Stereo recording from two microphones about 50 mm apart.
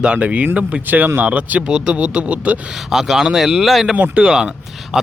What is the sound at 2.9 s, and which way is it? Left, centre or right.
Speech, centre.